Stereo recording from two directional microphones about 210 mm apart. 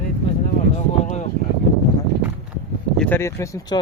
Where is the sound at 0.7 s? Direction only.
35° left (ahead or behind).